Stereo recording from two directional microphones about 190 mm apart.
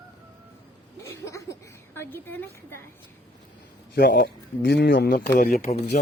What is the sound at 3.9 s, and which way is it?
A man's voice, 55° left (ahead or behind).